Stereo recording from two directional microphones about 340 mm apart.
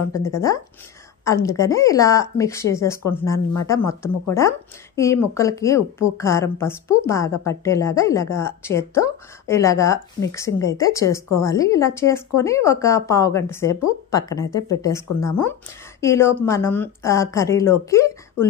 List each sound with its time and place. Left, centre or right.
0.2 s a woman's voice: centre